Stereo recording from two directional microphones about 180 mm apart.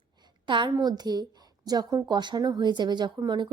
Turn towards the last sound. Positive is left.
turn(degrees=-25)  # may be behind; listen again after turning